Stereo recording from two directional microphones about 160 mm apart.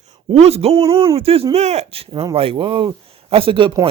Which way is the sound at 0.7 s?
20° right (ahead or behind).